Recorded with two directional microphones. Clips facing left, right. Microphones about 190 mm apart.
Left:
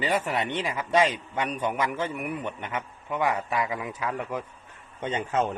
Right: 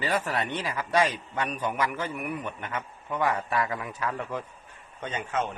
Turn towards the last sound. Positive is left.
turn(degrees=30)  # may be behind; listen again after turning